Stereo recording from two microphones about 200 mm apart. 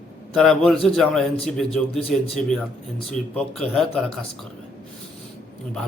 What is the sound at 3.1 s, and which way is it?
Speech, 5° left (ahead or behind).